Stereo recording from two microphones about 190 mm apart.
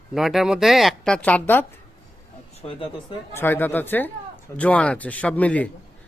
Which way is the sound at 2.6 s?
25° left (ahead or behind).